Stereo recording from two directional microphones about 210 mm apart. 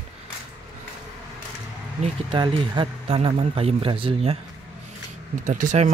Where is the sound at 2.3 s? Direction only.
20° right (ahead or behind).